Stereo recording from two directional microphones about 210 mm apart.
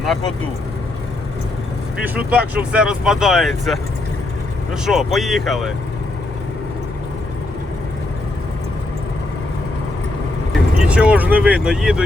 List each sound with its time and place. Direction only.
0.0 s speech: centre (ahead or behind)
2.1 s speech: 5° right (ahead or behind)
10.8 s speech: 5° right (ahead or behind)